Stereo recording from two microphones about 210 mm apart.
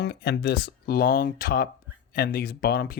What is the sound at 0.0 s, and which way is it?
Speech, 50° left (ahead or behind).